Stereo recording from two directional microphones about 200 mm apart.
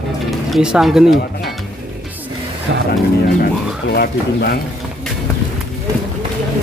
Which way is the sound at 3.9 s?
50° left (ahead or behind).